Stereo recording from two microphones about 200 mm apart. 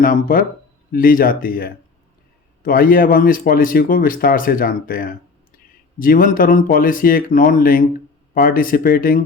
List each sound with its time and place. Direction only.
0.0 s a man's voice: 45° left (ahead or behind)